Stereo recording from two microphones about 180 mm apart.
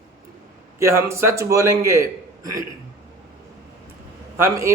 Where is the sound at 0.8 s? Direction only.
15° right (ahead or behind).